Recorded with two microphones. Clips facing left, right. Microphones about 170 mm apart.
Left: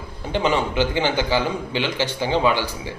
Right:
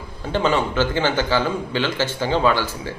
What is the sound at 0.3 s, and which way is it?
A man's voice, 15° left (ahead or behind).